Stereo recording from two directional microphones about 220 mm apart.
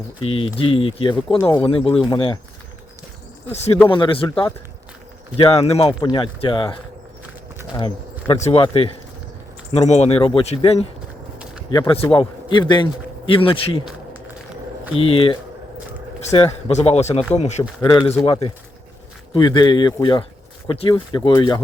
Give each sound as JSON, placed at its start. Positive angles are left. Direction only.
{"t": 0.2, "sound": "speech", "side_deg": 25}
{"t": 3.5, "sound": "speech", "side_deg": 30}
{"t": 7.8, "sound": "speech", "side_deg": 25}
{"t": 14.9, "sound": "speech", "side_deg": 25}
{"t": 17.7, "sound": "a man's voice", "side_deg": 15}